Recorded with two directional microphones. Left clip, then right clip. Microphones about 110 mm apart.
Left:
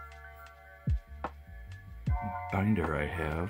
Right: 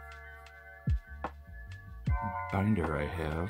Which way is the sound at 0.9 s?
Centre (ahead or behind).